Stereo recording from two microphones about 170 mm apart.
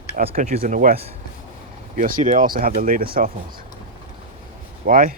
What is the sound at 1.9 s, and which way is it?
Speech, 50° right (ahead or behind).